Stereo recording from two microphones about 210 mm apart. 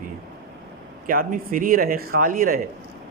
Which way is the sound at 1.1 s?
40° right (ahead or behind).